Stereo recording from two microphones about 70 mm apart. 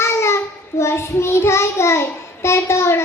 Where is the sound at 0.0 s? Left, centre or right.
Left.